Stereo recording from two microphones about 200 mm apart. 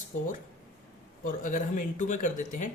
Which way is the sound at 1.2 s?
40° left (ahead or behind).